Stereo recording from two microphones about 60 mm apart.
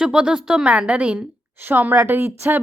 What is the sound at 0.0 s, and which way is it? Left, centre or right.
A woman's voice, centre.